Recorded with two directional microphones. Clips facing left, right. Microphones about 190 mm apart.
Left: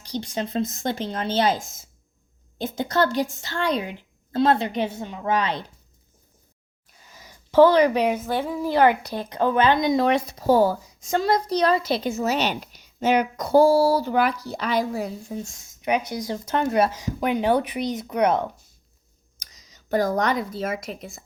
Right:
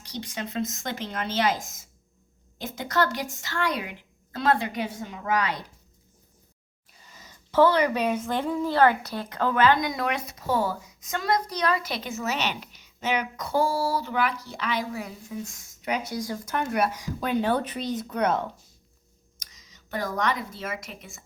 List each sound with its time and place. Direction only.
0.0 s a woman's voice: 30° left (ahead or behind)
7.2 s a woman's voice: 15° left (ahead or behind)
19.4 s speech: 40° left (ahead or behind)